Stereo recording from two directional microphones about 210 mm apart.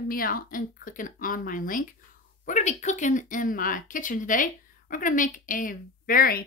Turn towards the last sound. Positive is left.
turn(degrees=40)  # may be behind; listen again after turning